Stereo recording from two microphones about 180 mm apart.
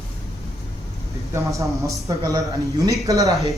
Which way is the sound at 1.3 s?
15° right (ahead or behind).